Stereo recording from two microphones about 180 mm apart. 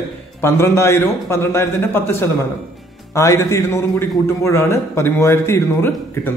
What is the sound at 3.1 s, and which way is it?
Speech, 15° left (ahead or behind).